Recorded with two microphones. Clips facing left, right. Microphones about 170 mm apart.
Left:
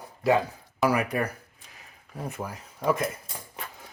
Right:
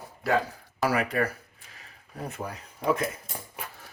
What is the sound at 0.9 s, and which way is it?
Speech, 15° left (ahead or behind).